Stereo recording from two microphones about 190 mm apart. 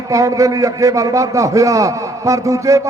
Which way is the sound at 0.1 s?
15° right (ahead or behind).